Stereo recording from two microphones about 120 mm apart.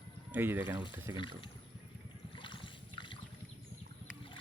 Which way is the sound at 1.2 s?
40° left (ahead or behind).